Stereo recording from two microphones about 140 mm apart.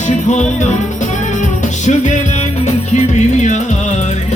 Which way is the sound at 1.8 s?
60° left (ahead or behind).